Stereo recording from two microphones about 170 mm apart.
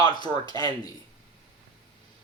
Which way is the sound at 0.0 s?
25° left (ahead or behind).